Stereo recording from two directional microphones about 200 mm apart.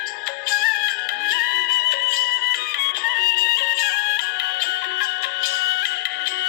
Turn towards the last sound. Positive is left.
turn(degrees=50)  # may be behind; listen again after turning